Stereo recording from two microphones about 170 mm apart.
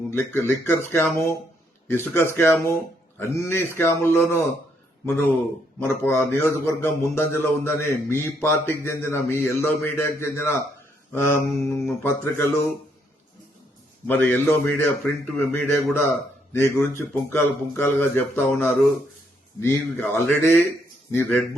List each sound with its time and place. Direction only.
0.1 s a man's voice: 15° left (ahead or behind)
14.1 s a man's voice: 10° left (ahead or behind)